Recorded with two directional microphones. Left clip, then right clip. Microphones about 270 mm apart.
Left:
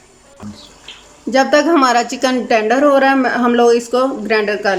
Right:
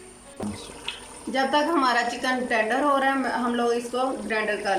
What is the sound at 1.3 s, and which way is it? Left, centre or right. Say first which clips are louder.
A woman's voice: left 11 dB; left.